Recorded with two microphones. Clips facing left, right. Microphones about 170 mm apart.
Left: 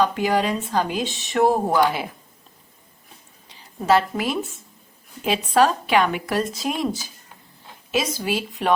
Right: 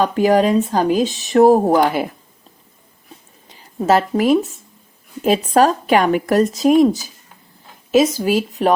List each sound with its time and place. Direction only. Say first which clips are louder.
0.0 s speech: right 6 dB; 45° right (ahead or behind)
3.8 s a woman's voice: right 5 dB; 45° right (ahead or behind)
5.5 s a woman's voice: right 2 dB; 45° right (ahead or behind)